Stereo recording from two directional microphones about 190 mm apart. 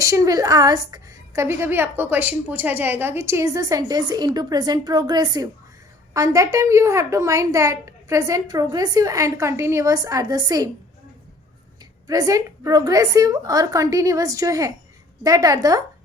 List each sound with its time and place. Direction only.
0.0 s a woman's voice: 15° right (ahead or behind)
12.0 s a woman's voice: 20° right (ahead or behind)